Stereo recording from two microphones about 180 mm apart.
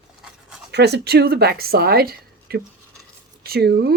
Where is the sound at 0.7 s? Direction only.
65° right (ahead or behind).